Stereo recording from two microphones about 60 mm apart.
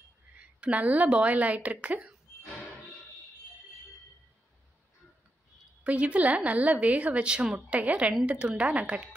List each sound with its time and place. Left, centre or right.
0.4 s a woman's voice: right
5.9 s a woman's voice: right